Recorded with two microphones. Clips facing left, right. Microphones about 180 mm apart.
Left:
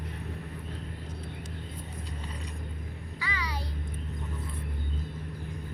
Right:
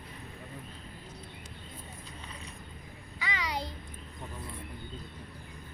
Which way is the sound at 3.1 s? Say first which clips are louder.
Right 2 dB; 20° right (ahead or behind).